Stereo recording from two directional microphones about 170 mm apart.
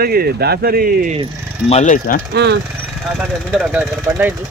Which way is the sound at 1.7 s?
45° left (ahead or behind).